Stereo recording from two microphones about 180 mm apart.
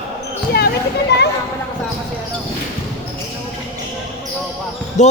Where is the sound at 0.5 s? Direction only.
65° left (ahead or behind).